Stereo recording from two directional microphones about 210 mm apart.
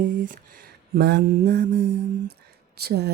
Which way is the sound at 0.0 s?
40° right (ahead or behind).